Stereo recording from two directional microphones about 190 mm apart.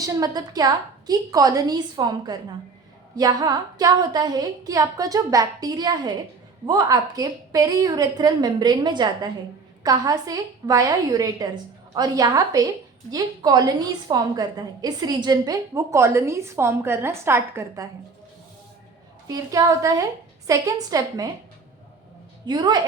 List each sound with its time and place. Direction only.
0.0 s a woman's voice: 20° right (ahead or behind)
19.3 s a woman's voice: 20° right (ahead or behind)
22.4 s a woman's voice: 20° right (ahead or behind)